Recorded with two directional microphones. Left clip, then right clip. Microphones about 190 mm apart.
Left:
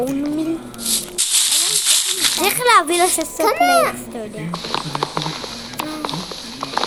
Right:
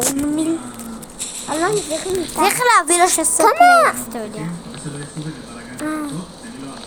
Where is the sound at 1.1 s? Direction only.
5° left (ahead or behind).